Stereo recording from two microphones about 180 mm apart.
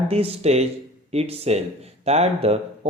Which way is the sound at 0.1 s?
35° right (ahead or behind).